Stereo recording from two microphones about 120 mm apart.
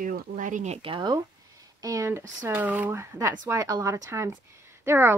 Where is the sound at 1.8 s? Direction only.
25° right (ahead or behind).